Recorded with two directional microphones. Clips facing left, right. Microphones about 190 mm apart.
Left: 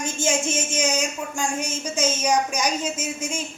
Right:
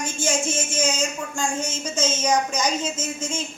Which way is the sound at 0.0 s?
20° left (ahead or behind).